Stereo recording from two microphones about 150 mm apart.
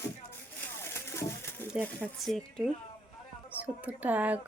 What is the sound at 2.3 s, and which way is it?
Speech, 5° left (ahead or behind).